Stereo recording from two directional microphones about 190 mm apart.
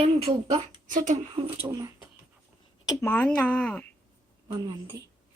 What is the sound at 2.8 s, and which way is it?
Speech, 10° left (ahead or behind).